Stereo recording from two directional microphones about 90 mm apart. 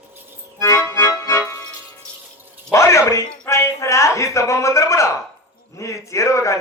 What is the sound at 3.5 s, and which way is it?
A man's voice, 30° left (ahead or behind).